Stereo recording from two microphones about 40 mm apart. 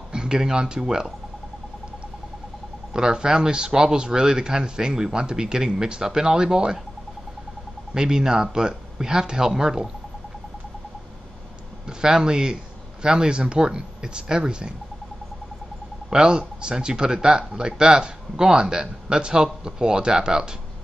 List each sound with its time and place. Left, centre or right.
0.1 s speech: centre
2.9 s speech: centre
7.9 s speech: centre
12.0 s speech: centre
16.1 s speech: centre